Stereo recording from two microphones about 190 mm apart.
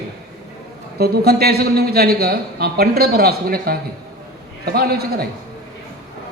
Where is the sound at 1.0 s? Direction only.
55° right (ahead or behind).